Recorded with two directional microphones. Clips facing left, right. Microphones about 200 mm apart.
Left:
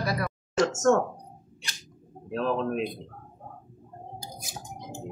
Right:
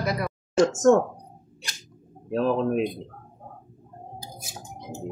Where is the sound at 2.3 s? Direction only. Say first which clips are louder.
Right 4 dB; 40° right (ahead or behind).